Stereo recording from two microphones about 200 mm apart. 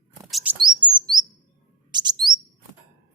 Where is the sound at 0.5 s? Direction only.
20° right (ahead or behind).